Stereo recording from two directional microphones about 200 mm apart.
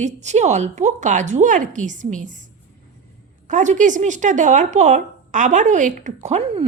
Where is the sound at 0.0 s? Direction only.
35° right (ahead or behind).